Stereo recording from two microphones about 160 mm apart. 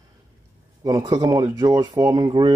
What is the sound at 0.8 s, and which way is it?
Speech, 25° right (ahead or behind).